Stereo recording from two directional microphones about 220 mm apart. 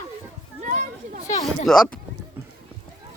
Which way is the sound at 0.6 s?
35° right (ahead or behind).